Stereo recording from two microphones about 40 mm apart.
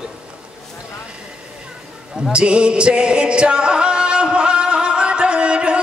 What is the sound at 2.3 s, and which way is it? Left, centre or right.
Music, right.